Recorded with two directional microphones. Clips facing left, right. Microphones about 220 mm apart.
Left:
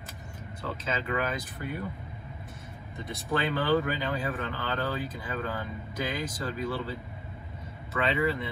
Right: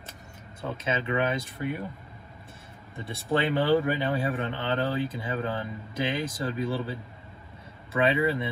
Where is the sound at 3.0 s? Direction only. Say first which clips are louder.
Right 3 dB; 30° right (ahead or behind).